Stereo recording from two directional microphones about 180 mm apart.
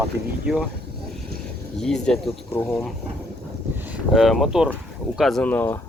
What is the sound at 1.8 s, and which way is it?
Speech, 5° left (ahead or behind).